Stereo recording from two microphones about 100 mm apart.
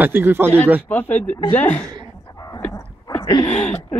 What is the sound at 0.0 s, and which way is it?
Speech, 20° right (ahead or behind).